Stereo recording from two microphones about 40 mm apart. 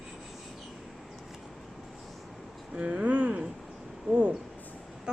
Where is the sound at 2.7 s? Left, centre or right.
Right.